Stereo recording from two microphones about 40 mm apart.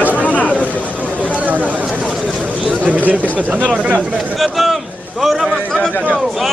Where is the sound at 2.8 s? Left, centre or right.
Right.